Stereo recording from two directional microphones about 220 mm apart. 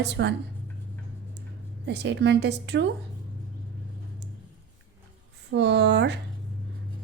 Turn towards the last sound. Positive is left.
turn(degrees=-50)  # may be behind; listen again after turning